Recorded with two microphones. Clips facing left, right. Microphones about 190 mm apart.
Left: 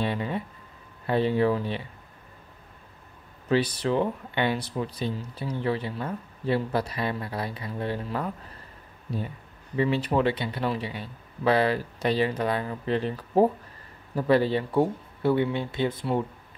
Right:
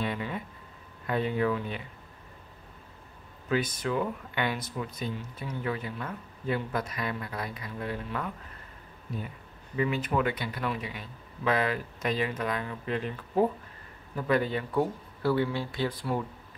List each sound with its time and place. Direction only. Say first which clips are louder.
0.0 s speech: left 4 dB; 30° left (ahead or behind)
3.4 s speech: left 5 dB; 35° left (ahead or behind)
9.8 s speech: left 4 dB; 30° left (ahead or behind)